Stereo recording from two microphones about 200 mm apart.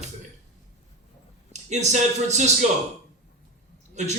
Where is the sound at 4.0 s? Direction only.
35° right (ahead or behind).